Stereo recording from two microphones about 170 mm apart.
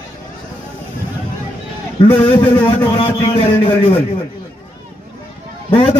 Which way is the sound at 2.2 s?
30° left (ahead or behind).